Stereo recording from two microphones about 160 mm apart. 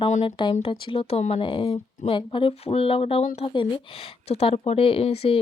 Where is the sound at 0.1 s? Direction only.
40° left (ahead or behind).